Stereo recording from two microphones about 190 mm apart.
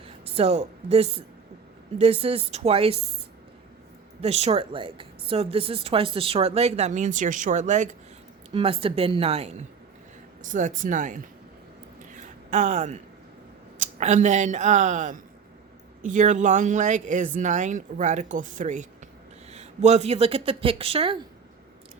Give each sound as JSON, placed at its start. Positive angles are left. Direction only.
{"t": 0.0, "sound": "a woman's voice", "side_deg": -30}
{"t": 4.2, "sound": "speech", "side_deg": -35}
{"t": 8.5, "sound": "speech", "side_deg": -30}
{"t": 10.5, "sound": "speech", "side_deg": -45}
{"t": 12.1, "sound": "a sound", "side_deg": -40}
{"t": 13.7, "sound": "speech", "side_deg": -40}